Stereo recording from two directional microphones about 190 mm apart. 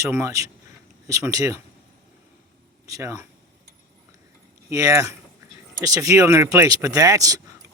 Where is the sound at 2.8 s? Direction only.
15° right (ahead or behind).